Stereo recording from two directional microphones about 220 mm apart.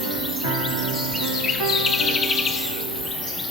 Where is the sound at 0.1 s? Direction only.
Centre (ahead or behind).